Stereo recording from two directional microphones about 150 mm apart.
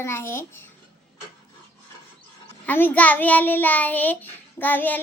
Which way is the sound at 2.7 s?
10° left (ahead or behind).